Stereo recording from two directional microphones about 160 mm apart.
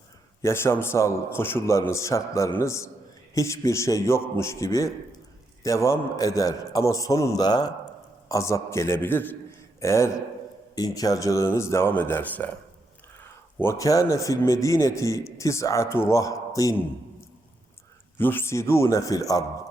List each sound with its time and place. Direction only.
0.4 s a man's voice: 15° left (ahead or behind)
13.6 s a man's voice: 20° left (ahead or behind)